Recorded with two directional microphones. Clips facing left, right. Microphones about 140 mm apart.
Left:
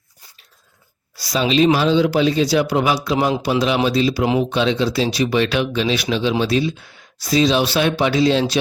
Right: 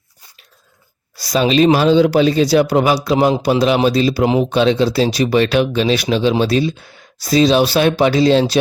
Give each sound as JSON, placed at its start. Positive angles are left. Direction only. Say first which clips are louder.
{"t": 1.2, "sound": "speech", "louder": "right 3 dB", "side_deg": -45}